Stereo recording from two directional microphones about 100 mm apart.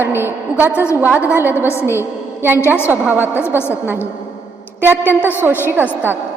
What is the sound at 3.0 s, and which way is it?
A woman's voice, 15° right (ahead or behind).